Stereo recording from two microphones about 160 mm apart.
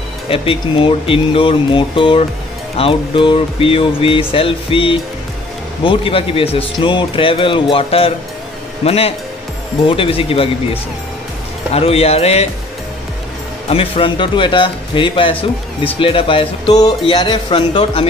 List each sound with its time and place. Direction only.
0.3 s speech: 35° left (ahead or behind)
13.7 s speech: 35° left (ahead or behind)